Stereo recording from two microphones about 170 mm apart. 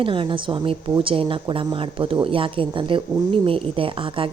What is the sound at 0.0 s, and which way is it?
A woman's voice, 30° right (ahead or behind).